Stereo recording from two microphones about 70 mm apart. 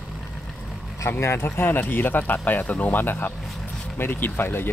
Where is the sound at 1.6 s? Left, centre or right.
Left.